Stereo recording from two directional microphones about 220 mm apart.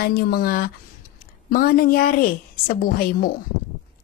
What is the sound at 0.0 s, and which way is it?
Speech, 45° left (ahead or behind).